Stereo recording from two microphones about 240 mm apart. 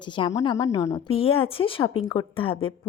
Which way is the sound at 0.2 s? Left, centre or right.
Centre.